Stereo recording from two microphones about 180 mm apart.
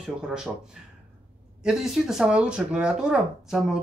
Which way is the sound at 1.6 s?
Centre (ahead or behind).